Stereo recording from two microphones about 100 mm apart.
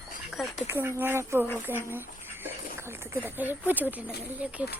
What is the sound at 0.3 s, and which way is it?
Speech, centre (ahead or behind).